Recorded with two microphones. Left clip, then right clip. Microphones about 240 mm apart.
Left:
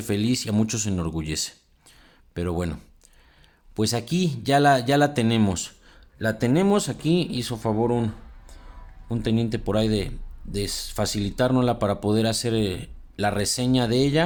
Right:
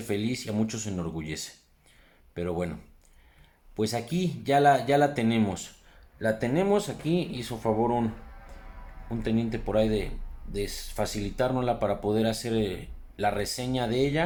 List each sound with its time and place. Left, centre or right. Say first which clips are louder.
0.0 s speech: left 5 dB; left
3.8 s speech: left 4 dB; left